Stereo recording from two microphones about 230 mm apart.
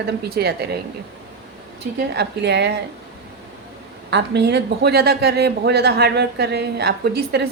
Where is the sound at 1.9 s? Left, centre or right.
Right.